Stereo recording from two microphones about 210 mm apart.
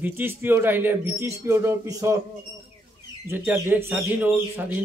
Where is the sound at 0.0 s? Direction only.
10° right (ahead or behind).